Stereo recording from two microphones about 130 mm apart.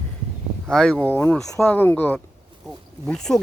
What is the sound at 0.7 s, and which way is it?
Speech, 5° left (ahead or behind).